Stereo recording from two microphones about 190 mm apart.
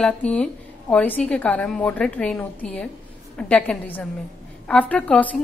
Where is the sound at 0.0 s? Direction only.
5° left (ahead or behind).